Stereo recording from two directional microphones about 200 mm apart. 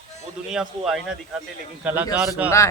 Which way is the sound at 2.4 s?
15° left (ahead or behind).